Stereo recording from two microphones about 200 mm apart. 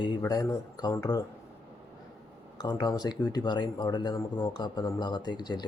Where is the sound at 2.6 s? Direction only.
20° left (ahead or behind).